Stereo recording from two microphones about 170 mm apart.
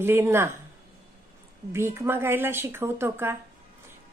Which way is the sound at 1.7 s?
15° right (ahead or behind).